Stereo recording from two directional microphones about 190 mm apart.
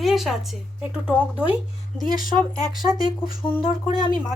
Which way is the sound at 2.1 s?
45° left (ahead or behind).